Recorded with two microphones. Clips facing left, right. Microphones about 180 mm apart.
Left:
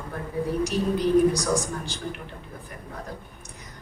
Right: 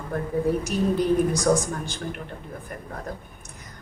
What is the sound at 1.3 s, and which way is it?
Speech, 50° right (ahead or behind).